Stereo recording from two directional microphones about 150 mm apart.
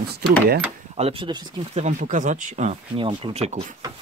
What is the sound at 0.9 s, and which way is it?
Speech, 40° right (ahead or behind).